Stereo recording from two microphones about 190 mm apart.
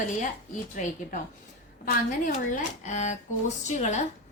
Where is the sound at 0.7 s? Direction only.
40° left (ahead or behind).